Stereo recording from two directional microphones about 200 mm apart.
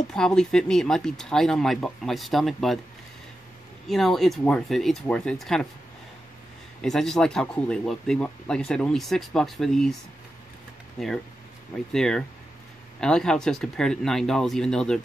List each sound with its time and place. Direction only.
0.1 s speech: 5° left (ahead or behind)
3.8 s speech: centre (ahead or behind)
6.8 s speech: centre (ahead or behind)
11.0 s speech: centre (ahead or behind)